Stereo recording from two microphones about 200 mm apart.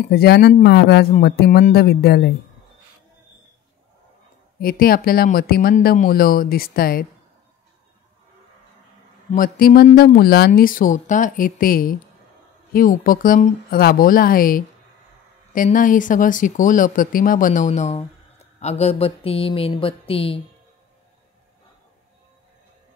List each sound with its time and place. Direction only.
0.0 s speech: 50° left (ahead or behind)
4.6 s speech: 45° left (ahead or behind)
9.3 s speech: 45° left (ahead or behind); by 20.3 s 30° left (ahead or behind)